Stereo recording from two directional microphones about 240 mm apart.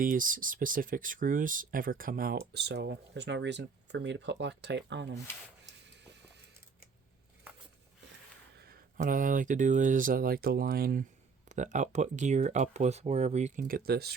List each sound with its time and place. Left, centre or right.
0.0 s speech: right
5.8 s music: right
8.5 s speech: right